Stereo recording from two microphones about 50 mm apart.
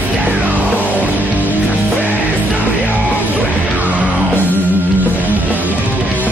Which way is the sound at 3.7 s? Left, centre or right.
Right.